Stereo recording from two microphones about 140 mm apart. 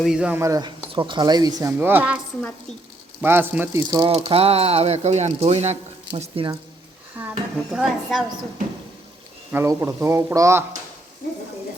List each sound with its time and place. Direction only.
0.0 s a woman's voice: 5° right (ahead or behind)
0.3 s speech: 25° right (ahead or behind)
0.9 s speech: 35° right (ahead or behind)
1.8 s speech: 15° right (ahead or behind)
3.2 s speech: 15° right (ahead or behind)
4.3 s speech: 45° right (ahead or behind)
7.2 s speech: 10° right (ahead or behind)
7.8 s a woman's voice: centre (ahead or behind)
9.5 s speech: 20° right (ahead or behind)